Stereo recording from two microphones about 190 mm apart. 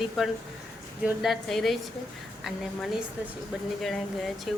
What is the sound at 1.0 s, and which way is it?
A woman's voice, centre (ahead or behind).